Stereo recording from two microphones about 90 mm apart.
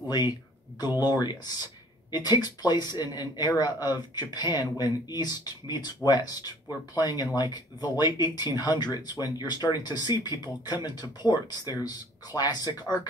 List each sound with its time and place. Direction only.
0.7 s speech: 50° left (ahead or behind)